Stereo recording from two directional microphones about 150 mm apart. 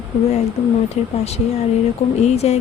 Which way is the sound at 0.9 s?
45° left (ahead or behind).